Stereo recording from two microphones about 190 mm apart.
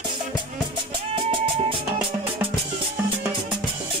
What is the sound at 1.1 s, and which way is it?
Music, 25° right (ahead or behind).